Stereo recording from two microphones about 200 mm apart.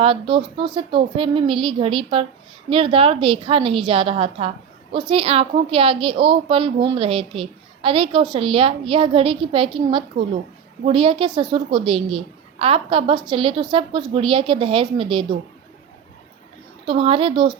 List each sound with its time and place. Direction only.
0.0 s a woman's voice: 25° right (ahead or behind)
16.8 s a woman's voice: 25° right (ahead or behind)